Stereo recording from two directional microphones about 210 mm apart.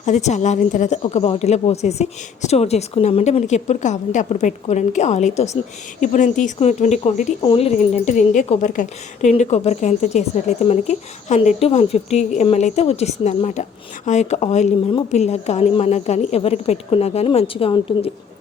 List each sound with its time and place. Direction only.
0.0 s speech: 35° left (ahead or behind)